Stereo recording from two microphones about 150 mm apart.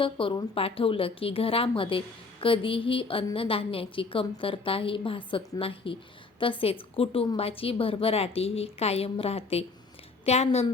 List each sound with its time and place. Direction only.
0.0 s a woman's voice: 35° left (ahead or behind)